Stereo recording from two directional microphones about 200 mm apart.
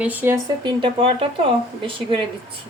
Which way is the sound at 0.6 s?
25° right (ahead or behind).